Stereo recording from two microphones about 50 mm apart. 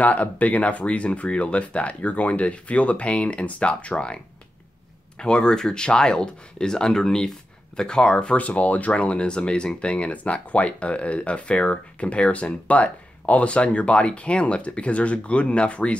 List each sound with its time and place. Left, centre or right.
0.0 s speech: left
5.2 s speech: centre
8.4 s speech: left